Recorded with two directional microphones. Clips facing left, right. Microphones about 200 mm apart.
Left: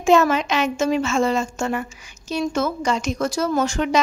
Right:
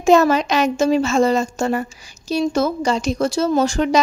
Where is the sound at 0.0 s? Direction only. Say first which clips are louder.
Right 3 dB; 40° right (ahead or behind).